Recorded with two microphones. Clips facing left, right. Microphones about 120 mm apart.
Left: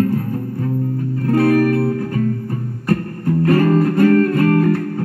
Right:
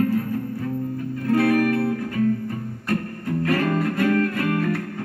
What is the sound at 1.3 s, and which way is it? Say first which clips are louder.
Music: left 5 dB; 40° left (ahead or behind).